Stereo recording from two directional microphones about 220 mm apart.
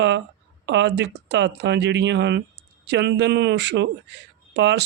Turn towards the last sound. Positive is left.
turn(degrees=-50)  # may be behind; listen again after turning